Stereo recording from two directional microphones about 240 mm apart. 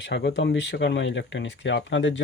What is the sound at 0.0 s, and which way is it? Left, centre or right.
Speech, left.